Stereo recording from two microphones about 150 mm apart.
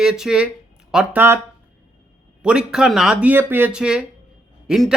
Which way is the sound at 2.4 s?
5° right (ahead or behind).